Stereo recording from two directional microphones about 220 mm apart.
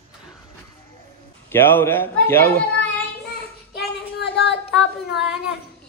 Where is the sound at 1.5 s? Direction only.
10° left (ahead or behind).